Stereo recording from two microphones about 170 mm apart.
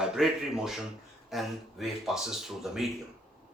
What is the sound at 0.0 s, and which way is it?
Speech, 5° right (ahead or behind).